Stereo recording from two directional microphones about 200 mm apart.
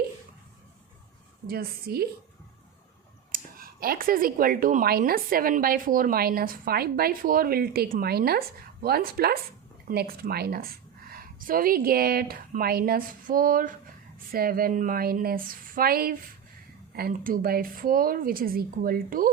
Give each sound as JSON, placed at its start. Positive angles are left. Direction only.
{"t": 1.5, "sound": "speech", "side_deg": -50}
{"t": 3.3, "sound": "speech", "side_deg": -45}